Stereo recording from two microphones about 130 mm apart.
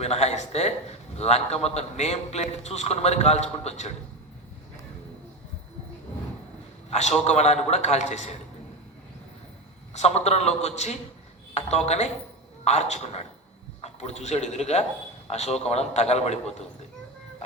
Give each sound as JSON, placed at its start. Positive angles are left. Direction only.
{"t": 0.0, "sound": "a man's voice", "side_deg": 55}
{"t": 7.3, "sound": "a man's voice", "side_deg": 55}
{"t": 9.9, "sound": "a man's voice", "side_deg": 60}